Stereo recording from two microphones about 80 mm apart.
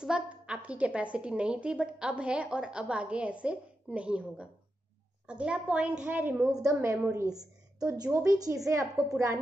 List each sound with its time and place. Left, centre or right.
0.0 s a woman's voice: centre
6.6 s a woman's voice: right
8.1 s a woman's voice: right